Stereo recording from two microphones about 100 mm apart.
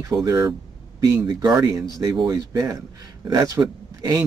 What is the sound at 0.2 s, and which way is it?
Speech, 35° right (ahead or behind).